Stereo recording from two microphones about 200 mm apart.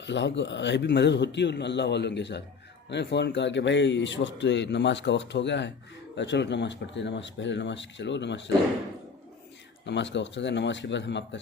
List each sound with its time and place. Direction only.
0.0 s a man's voice: 60° left (ahead or behind)
9.8 s a man's voice: 60° left (ahead or behind)